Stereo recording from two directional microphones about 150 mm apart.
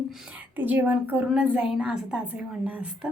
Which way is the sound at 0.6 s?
10° right (ahead or behind).